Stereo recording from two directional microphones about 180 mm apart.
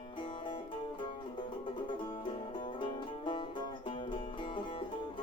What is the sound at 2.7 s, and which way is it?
Music, 25° left (ahead or behind).